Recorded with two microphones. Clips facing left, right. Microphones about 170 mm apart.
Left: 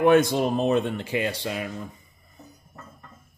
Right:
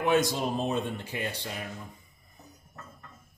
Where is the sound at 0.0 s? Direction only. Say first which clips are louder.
Left 7 dB; 55° left (ahead or behind); by 1.7 s 90° left.